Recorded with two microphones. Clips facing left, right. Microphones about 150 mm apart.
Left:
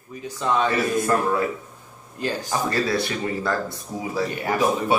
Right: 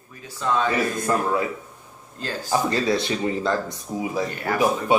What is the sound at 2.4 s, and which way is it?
Speech, 20° right (ahead or behind).